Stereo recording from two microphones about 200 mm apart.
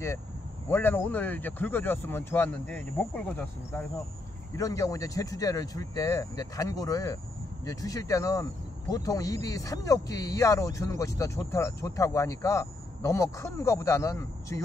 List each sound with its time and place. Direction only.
0.7 s speech: 10° left (ahead or behind)